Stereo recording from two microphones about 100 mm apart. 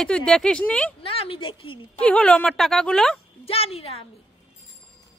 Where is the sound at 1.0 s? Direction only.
65° left (ahead or behind).